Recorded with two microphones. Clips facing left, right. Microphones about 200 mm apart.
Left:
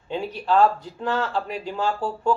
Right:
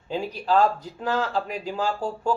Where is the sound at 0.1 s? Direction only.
35° right (ahead or behind).